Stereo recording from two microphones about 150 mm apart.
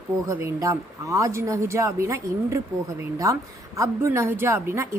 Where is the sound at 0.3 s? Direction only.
20° right (ahead or behind).